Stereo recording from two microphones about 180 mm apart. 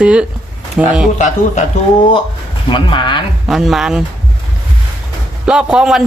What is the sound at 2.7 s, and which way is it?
Speech, 25° left (ahead or behind).